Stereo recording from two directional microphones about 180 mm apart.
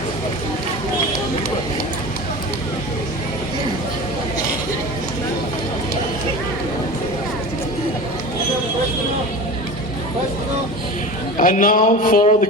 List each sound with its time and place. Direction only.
11.3 s speech: 45° left (ahead or behind)